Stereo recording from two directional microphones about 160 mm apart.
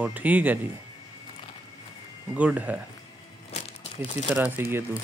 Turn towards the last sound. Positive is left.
turn(degrees=-15)  # may be behind; listen again after turning